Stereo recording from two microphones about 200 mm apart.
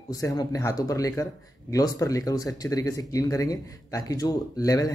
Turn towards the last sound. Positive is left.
turn(degrees=15)  # may be behind; listen again after turning